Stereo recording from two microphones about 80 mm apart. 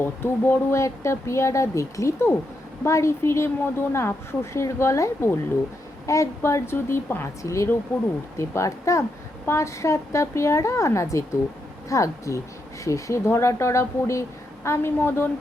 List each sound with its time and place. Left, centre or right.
0.0 s speech: left
0.8 s a woman's voice: left